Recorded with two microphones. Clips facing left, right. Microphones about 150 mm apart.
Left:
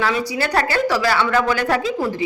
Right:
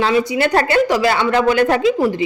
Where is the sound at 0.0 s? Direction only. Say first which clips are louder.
Right 5 dB; 20° right (ahead or behind).